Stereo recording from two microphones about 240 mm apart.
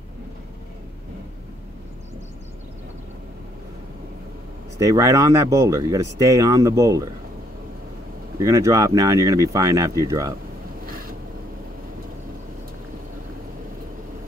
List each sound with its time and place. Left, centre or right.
4.7 s speech: centre
8.4 s speech: centre
10.9 s vehicle: right